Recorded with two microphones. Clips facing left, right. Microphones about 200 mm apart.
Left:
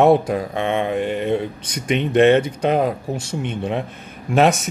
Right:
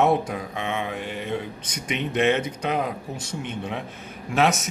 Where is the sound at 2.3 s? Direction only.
30° left (ahead or behind).